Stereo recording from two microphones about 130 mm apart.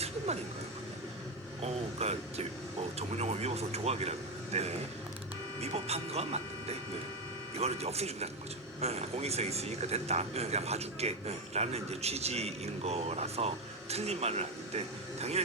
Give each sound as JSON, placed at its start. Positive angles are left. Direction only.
{"t": 1.6, "sound": "speech", "side_deg": -55}